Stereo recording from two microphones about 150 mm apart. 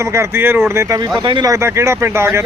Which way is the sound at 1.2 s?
30° right (ahead or behind).